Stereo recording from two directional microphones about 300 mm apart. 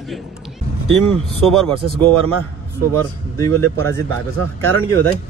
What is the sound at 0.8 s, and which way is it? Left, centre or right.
Speech, right.